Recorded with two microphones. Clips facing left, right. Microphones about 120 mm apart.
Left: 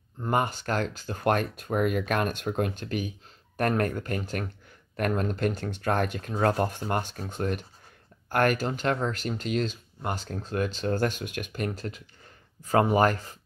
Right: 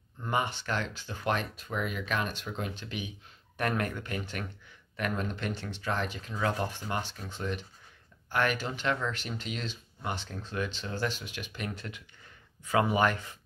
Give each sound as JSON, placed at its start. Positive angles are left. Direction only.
{"t": 0.2, "sound": "speech", "side_deg": 45}